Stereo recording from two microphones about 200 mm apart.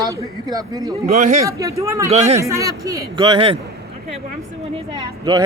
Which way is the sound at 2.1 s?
30° right (ahead or behind).